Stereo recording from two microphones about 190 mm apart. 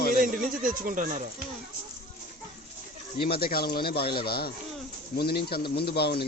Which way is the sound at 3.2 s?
55° left (ahead or behind).